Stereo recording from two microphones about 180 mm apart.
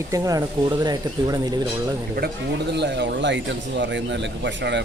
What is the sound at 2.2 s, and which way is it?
Speech, 60° right (ahead or behind).